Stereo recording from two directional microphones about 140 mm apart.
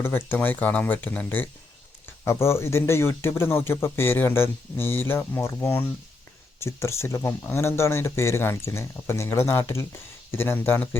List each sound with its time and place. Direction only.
0.3 s speech: 15° left (ahead or behind)